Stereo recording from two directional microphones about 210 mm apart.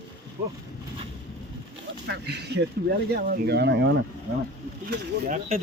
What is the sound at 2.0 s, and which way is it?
Speech, 50° right (ahead or behind).